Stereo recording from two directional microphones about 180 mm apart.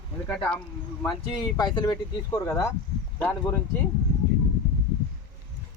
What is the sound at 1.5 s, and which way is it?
Speech, 25° left (ahead or behind).